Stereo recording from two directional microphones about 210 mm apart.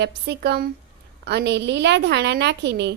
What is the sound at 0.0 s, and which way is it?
A woman's voice, 50° right (ahead or behind).